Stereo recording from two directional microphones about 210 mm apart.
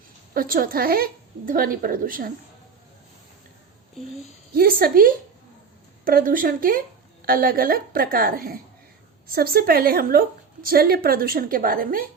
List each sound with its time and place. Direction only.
0.3 s a woman's voice: 45° right (ahead or behind)
4.5 s a woman's voice: 45° right (ahead or behind)